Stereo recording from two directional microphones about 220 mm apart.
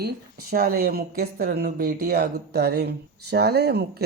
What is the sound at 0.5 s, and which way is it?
Speech, 45° right (ahead or behind).